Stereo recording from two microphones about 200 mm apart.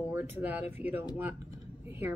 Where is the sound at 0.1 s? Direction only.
10° right (ahead or behind).